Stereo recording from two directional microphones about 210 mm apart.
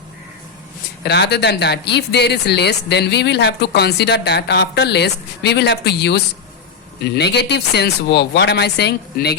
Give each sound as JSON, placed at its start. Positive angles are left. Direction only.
{"t": 1.0, "sound": "speech", "side_deg": 55}